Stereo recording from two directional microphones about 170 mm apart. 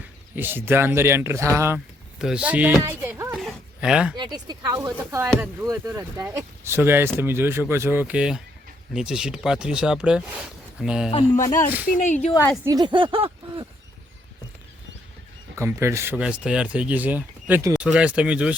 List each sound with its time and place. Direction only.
0.3 s speech: 10° right (ahead or behind)
2.1 s speech: 5° right (ahead or behind)
3.3 s a sound: centre (ahead or behind)
4.2 s speech: 25° right (ahead or behind); by 11.1 s 5° right (ahead or behind)
11.1 s speech: 35° left (ahead or behind)
12.6 s speech: 25° right (ahead or behind)
15.5 s speech: 15° right (ahead or behind)